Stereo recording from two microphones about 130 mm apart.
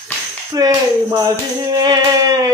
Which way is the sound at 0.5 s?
25° right (ahead or behind).